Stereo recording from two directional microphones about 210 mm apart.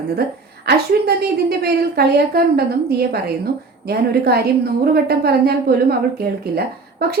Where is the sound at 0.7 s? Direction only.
50° right (ahead or behind).